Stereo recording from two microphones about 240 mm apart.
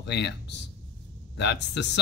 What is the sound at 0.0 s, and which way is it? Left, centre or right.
A man's voice, left.